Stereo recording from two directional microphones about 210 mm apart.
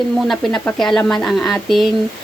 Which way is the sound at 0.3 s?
Centre (ahead or behind).